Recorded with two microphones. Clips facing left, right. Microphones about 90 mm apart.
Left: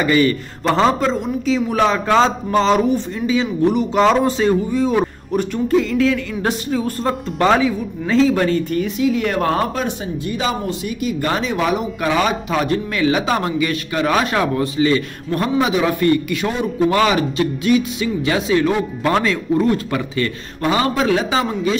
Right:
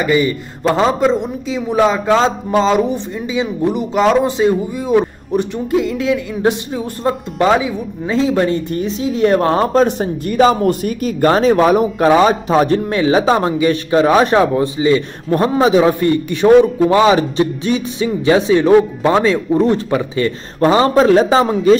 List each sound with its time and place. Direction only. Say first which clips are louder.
0.0 s a man's voice: right 1 dB; 15° right (ahead or behind)
10.2 s speech: right 10 dB; 50° right (ahead or behind); by 20.2 s 25° right (ahead or behind)
20.6 s speech: right 7 dB; 35° right (ahead or behind)